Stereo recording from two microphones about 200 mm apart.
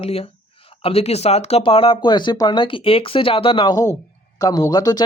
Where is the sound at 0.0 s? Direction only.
30° left (ahead or behind).